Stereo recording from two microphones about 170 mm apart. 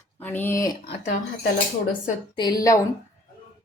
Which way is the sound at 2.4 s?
25° left (ahead or behind).